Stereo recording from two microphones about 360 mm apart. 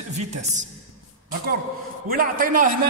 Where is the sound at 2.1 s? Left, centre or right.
Right.